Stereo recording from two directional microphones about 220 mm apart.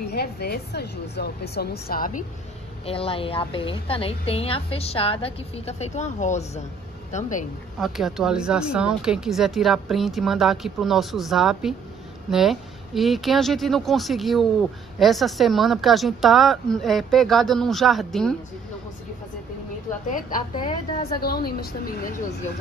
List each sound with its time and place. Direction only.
0.1 s speech: 45° left (ahead or behind)
2.9 s a woman's voice: 25° left (ahead or behind)
7.8 s speech: centre (ahead or behind)
20.1 s speech: 40° left (ahead or behind)
20.5 s a woman's voice: 20° left (ahead or behind)
21.5 s speech: 45° left (ahead or behind)